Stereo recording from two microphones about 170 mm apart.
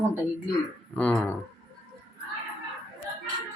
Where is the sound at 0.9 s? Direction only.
5° left (ahead or behind).